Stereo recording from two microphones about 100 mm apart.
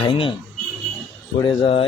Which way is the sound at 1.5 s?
65° left (ahead or behind).